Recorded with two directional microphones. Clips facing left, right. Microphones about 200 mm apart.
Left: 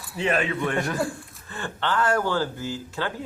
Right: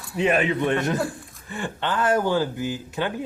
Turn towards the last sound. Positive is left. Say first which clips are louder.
# right 3 dB
turn(degrees=-15)  # may be behind; listen again after turning